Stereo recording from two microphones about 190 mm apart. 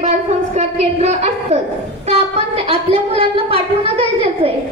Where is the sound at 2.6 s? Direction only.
30° right (ahead or behind).